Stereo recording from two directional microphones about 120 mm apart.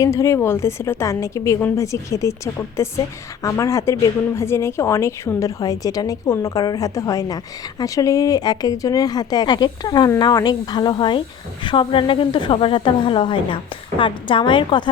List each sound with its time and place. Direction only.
0.0 s a woman's voice: 25° left (ahead or behind)